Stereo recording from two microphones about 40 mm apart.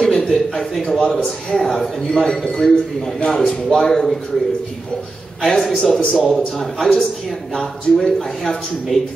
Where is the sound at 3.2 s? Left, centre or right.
Left.